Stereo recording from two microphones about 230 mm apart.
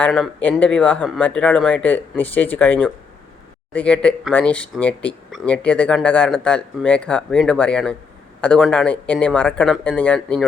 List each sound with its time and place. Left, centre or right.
0.0 s speech: centre